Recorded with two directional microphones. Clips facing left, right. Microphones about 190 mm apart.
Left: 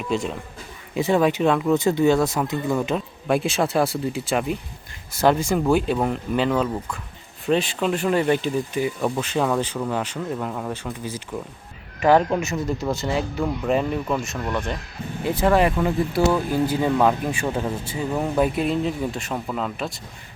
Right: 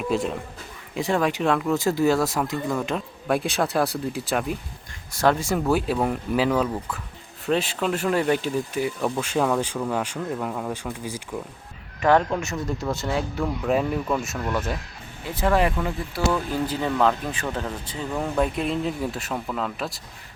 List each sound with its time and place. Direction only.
0.1 s speech: centre (ahead or behind)
11.9 s speech: 5° left (ahead or behind)
15.2 s speech: 20° left (ahead or behind)
16.3 s speech: 10° left (ahead or behind)